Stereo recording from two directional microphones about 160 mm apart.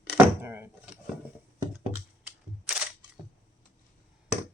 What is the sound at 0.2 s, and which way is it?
Door, 15° right (ahead or behind).